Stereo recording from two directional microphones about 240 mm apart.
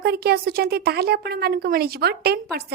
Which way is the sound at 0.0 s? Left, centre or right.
Right.